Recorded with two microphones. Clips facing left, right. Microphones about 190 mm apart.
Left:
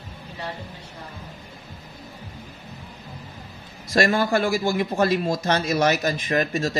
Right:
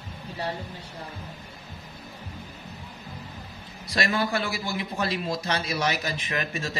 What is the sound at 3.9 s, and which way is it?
A man's voice, 45° left (ahead or behind).